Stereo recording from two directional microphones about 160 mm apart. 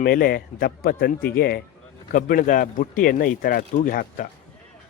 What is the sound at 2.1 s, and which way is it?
Speech, 65° left (ahead or behind).